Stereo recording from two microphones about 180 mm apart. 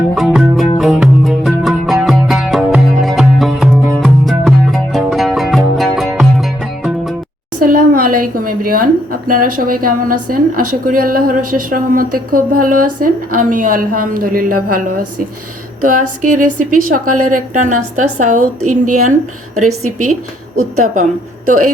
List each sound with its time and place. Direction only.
0.1 s music: centre (ahead or behind)
7.6 s a woman's voice: 50° right (ahead or behind)
20.8 s a woman's voice: 45° right (ahead or behind)